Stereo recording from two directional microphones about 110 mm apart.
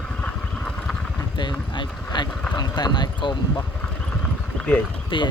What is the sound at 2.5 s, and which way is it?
Speech, 40° left (ahead or behind).